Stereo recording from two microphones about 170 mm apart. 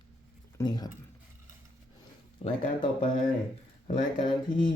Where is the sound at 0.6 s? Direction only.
25° left (ahead or behind).